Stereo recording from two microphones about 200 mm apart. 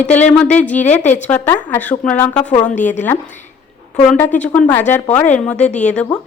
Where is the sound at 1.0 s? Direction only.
35° left (ahead or behind).